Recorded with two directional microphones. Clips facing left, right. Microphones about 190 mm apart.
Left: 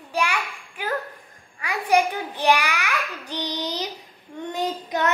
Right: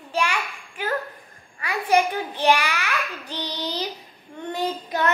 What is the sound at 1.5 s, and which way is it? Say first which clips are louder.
A child's voice: even; 10° left (ahead or behind).